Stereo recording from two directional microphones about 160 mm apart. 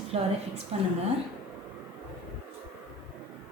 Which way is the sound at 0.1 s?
40° right (ahead or behind).